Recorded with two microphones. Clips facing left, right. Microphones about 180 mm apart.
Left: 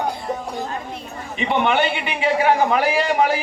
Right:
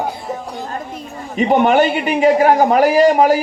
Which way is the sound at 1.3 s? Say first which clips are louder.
Right 7 dB; 40° right (ahead or behind).